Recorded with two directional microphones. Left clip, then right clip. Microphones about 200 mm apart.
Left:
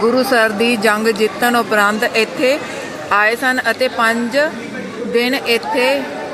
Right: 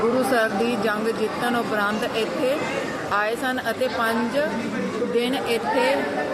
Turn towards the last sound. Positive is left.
turn(degrees=20)  # may be behind; listen again after turning